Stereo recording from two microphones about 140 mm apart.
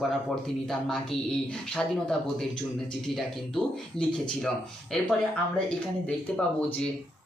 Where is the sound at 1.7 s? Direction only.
5° left (ahead or behind).